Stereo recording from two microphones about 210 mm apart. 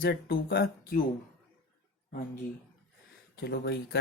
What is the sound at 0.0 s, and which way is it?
Speech, 45° left (ahead or behind).